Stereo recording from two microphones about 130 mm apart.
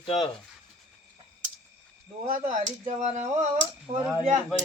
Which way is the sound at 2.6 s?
70° right (ahead or behind).